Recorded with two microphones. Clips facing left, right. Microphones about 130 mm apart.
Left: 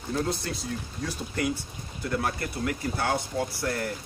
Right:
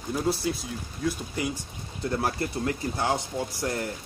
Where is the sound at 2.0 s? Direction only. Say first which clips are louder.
Right 2 dB; 30° right (ahead or behind).